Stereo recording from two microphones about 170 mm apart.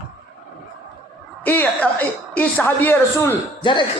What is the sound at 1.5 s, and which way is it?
A woman's voice, 10° left (ahead or behind).